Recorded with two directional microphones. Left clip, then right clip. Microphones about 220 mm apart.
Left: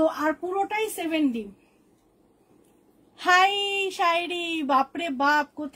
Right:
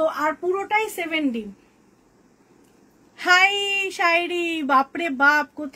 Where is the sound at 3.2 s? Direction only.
20° right (ahead or behind).